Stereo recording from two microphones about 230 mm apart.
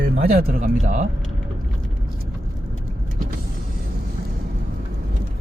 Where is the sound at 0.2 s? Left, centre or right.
Right.